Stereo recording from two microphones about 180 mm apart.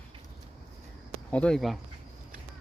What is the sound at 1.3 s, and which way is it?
Speech, 5° left (ahead or behind).